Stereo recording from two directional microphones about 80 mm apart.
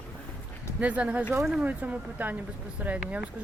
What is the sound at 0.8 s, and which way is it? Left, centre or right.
Speech, centre.